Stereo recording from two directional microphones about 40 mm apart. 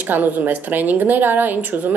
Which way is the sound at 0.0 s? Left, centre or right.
Right.